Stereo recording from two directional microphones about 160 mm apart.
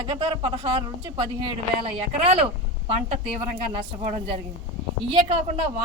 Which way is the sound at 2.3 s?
35° right (ahead or behind).